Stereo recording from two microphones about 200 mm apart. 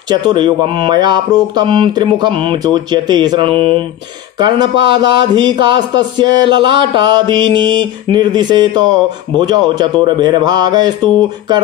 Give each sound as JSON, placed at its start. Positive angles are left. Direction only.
{"t": 0.1, "sound": "speech", "side_deg": -20}